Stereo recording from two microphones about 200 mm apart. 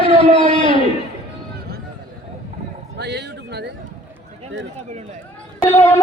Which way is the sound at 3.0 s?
60° right (ahead or behind).